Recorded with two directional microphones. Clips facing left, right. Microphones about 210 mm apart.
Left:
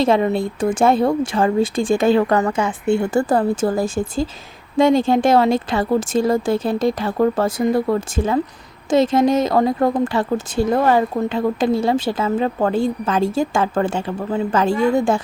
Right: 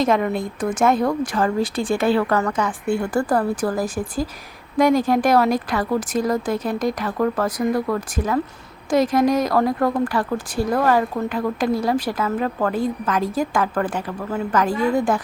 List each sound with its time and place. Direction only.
0.0 s speech: 30° left (ahead or behind)